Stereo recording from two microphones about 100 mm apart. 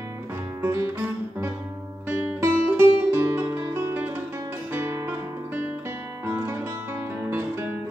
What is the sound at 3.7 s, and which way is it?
Music, 20° right (ahead or behind).